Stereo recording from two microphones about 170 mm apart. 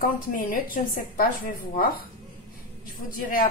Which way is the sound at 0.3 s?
50° left (ahead or behind).